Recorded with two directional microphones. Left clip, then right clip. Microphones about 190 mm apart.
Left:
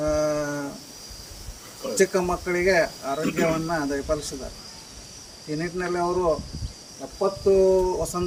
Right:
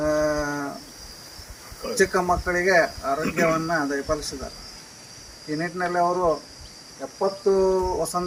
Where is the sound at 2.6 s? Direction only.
15° left (ahead or behind).